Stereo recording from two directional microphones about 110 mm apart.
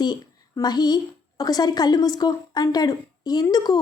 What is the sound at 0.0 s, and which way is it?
A woman's voice, 40° left (ahead or behind).